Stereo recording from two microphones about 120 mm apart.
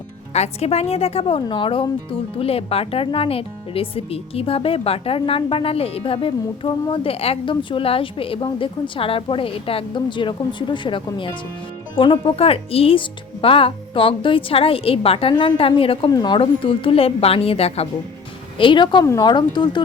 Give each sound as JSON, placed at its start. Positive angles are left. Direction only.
{"t": 0.3, "sound": "a woman's voice", "side_deg": 65}
{"t": 16.0, "sound": "speech", "side_deg": 35}
{"t": 16.4, "sound": "a woman's voice", "side_deg": 50}
{"t": 18.5, "sound": "speech", "side_deg": 45}